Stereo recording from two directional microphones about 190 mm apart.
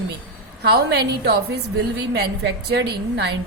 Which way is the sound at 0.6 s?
60° right (ahead or behind).